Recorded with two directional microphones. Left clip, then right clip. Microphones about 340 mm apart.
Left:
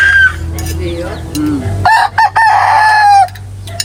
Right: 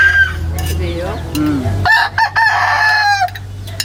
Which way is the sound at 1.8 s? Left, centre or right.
Centre.